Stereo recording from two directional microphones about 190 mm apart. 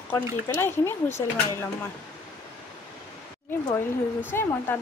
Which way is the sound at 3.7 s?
10° left (ahead or behind).